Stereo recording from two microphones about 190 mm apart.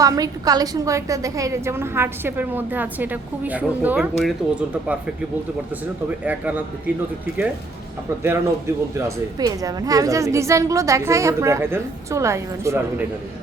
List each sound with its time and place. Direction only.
0.0 s a woman's voice: 20° right (ahead or behind); by 4.9 s 5° right (ahead or behind)
6.2 s a woman's voice: 10° right (ahead or behind)
8.2 s a woman's voice: 15° right (ahead or behind)